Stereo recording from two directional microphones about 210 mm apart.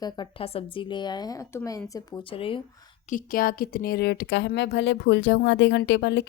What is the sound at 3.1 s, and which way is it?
Speech, 40° left (ahead or behind).